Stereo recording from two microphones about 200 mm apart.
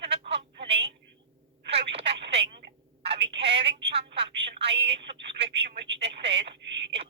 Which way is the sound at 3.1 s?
60° right (ahead or behind).